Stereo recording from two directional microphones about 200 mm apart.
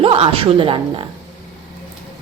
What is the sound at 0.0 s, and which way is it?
Speech, 25° right (ahead or behind).